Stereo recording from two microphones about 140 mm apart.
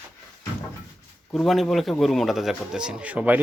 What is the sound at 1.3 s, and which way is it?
A man's voice, centre (ahead or behind).